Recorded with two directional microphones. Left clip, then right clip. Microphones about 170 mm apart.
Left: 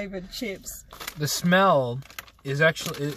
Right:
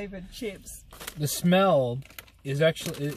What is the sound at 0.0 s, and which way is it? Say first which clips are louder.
Speech: left 3 dB; 20° left (ahead or behind).